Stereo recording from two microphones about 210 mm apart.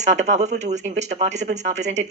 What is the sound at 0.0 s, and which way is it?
Speech, 35° right (ahead or behind).